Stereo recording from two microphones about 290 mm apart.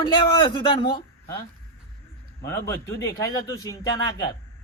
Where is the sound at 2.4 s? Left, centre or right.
Centre.